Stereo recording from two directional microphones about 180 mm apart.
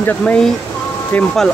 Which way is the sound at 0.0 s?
5° left (ahead or behind).